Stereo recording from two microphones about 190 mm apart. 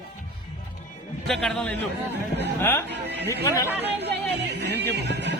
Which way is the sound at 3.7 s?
10° right (ahead or behind).